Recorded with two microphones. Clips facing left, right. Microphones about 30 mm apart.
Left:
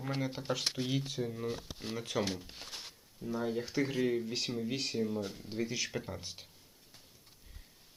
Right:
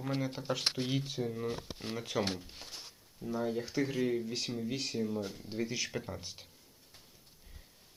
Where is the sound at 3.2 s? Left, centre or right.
Centre.